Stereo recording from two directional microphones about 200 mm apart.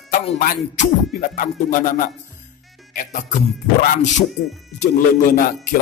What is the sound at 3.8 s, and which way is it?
Speech, 40° left (ahead or behind).